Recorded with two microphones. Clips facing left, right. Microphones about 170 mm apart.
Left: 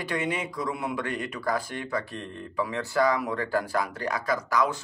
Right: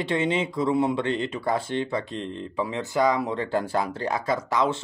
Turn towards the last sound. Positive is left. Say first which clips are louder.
# right 2 dB
turn(degrees=-25)  # may be behind; listen again after turning